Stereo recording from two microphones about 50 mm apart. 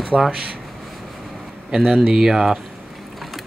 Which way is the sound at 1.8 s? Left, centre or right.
Centre.